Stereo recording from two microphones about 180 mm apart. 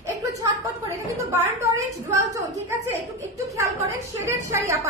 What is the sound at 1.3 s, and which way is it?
A woman's voice, 15° right (ahead or behind).